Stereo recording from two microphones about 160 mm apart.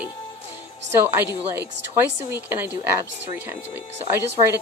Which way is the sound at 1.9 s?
10° right (ahead or behind).